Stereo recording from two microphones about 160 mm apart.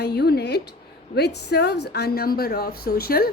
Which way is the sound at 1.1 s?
90° left.